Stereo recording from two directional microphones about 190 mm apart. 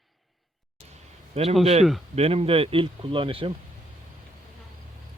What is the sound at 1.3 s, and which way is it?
Speech, 30° right (ahead or behind).